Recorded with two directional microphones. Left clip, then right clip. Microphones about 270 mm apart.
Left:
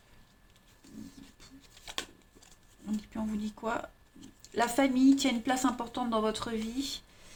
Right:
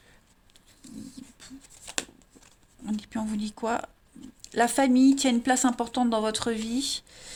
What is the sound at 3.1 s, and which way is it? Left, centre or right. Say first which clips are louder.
Speech: right 5 dB; right.